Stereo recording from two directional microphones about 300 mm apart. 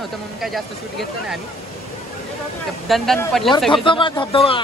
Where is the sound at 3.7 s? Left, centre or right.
Centre.